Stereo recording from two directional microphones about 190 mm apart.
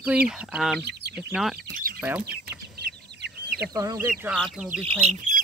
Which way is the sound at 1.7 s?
50° right (ahead or behind).